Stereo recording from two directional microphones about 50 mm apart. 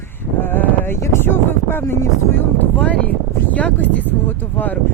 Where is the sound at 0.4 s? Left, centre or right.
Left.